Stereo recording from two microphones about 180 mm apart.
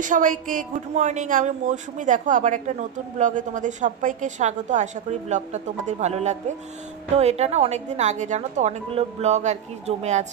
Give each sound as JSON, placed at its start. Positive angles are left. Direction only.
{"t": 0.0, "sound": "a woman's voice", "side_deg": -45}